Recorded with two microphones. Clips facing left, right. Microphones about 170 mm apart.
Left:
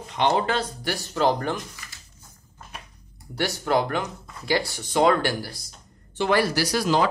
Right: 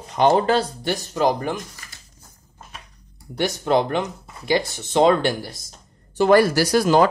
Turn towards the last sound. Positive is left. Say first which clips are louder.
# right 6 dB
turn(degrees=-50)  # may be behind; listen again after turning